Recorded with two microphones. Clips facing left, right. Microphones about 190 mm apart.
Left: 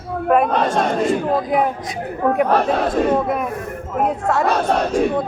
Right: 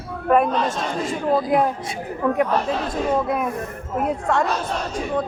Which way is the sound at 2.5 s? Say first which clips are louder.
Left 5 dB; 60° left (ahead or behind).